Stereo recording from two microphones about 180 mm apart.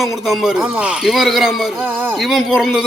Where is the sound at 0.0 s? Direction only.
Centre (ahead or behind).